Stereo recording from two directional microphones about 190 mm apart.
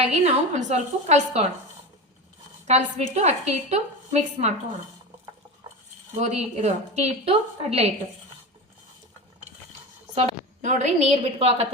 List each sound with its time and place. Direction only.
0.0 s a woman's voice: 35° right (ahead or behind)
2.6 s a woman's voice: 35° right (ahead or behind)
6.1 s a woman's voice: 35° right (ahead or behind)
10.2 s a woman's voice: 35° right (ahead or behind)